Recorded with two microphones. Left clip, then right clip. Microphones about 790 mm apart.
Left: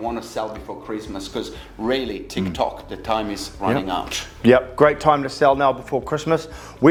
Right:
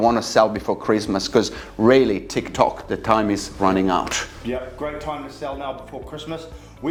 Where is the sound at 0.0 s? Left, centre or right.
Right.